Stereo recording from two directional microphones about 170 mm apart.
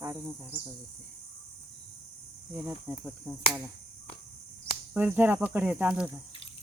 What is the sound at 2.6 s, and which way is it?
Speech, 5° right (ahead or behind).